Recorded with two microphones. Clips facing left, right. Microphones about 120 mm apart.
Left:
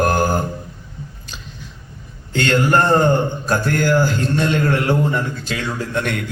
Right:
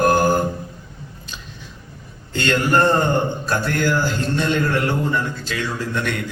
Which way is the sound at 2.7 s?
45° left (ahead or behind).